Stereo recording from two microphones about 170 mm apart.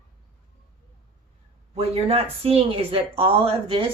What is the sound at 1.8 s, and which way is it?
Speech, 35° right (ahead or behind).